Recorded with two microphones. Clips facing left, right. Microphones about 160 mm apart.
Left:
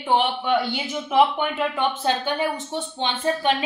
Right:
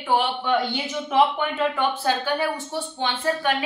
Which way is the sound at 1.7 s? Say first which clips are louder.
Even; 20° left (ahead or behind).